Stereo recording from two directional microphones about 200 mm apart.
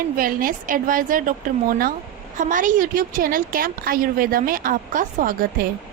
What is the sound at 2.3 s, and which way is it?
A woman's voice, 40° right (ahead or behind).